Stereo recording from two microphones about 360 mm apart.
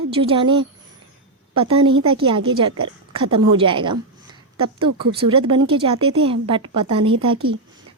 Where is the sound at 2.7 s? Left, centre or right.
Right.